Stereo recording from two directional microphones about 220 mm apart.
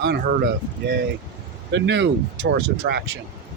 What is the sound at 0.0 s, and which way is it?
Speech, 50° right (ahead or behind).